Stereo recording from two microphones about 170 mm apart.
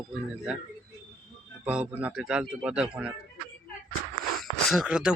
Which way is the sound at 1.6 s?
5° right (ahead or behind).